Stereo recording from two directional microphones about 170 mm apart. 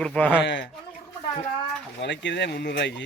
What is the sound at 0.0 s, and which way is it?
Speech, 5° left (ahead or behind).